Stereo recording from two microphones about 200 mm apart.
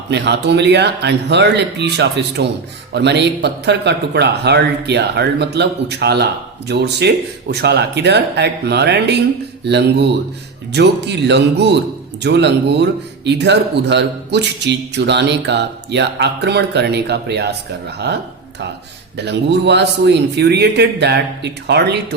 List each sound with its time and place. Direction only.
0.1 s speech: 60° right (ahead or behind)